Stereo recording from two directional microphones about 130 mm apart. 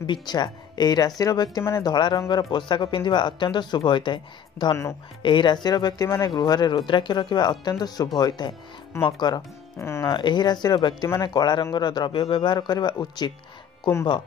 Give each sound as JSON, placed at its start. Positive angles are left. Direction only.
{"t": 0.0, "sound": "speech", "side_deg": 35}
{"t": 9.8, "sound": "speech", "side_deg": 20}
{"t": 10.1, "sound": "speech", "side_deg": 35}